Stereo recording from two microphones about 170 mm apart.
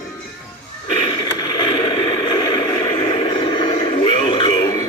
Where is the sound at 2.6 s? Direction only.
20° left (ahead or behind).